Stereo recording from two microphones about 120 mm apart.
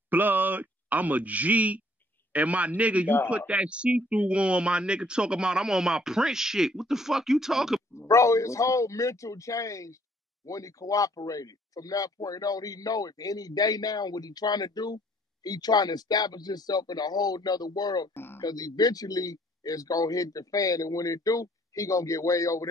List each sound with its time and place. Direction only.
0.1 s speech: 15° right (ahead or behind)
8.1 s speech: 25° left (ahead or behind)
18.1 s speech: 20° left (ahead or behind)
18.4 s speech: 30° left (ahead or behind)